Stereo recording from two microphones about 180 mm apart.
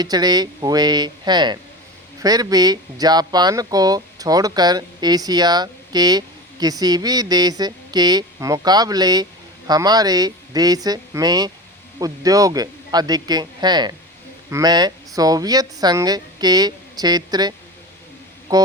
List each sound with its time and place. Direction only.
0.0 s speech: 20° right (ahead or behind)
18.5 s speech: 20° right (ahead or behind)